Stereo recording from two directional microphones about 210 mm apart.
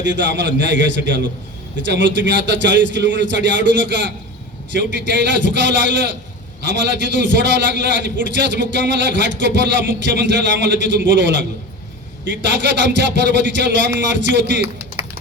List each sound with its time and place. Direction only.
0.0 s a man's voice: 60° right (ahead or behind)